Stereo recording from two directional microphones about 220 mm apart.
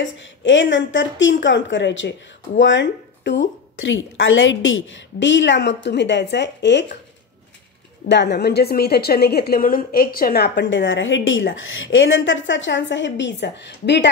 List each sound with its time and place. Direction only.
0.0 s a woman's voice: 55° left (ahead or behind)
8.1 s a woman's voice: 50° left (ahead or behind)